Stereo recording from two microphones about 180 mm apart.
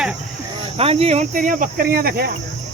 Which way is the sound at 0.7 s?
35° right (ahead or behind).